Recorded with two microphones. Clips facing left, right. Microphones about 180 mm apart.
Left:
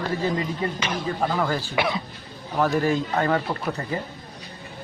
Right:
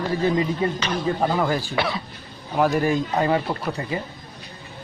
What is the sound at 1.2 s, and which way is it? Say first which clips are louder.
A man's voice: even; 15° right (ahead or behind).